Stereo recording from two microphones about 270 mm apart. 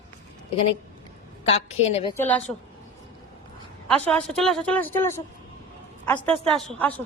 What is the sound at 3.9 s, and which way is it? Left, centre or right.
A woman's voice, centre.